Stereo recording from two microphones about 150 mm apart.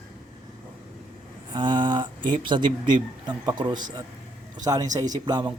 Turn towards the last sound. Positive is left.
turn(degrees=-30)  # may be behind; listen again after turning